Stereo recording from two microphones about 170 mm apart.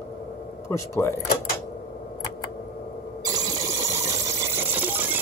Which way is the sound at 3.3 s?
20° right (ahead or behind).